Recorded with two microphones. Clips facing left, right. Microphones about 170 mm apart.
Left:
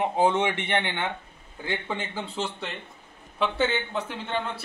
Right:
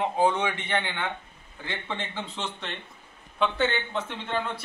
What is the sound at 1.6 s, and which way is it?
A man's voice, 10° left (ahead or behind).